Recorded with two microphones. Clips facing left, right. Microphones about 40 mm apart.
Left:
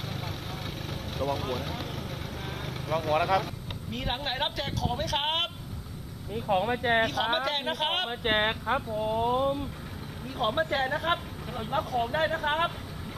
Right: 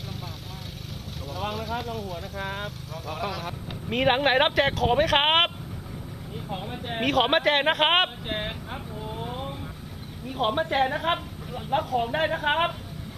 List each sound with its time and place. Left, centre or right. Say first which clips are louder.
1.7 s speech: right 5 dB; right
2.9 s speech: left 9 dB; left
3.9 s speech: right 12 dB; right
6.5 s speech: left 9 dB; left
7.0 s speech: right 4 dB; right
8.2 s speech: left 5 dB; left
10.4 s a woman's voice: right 3 dB; right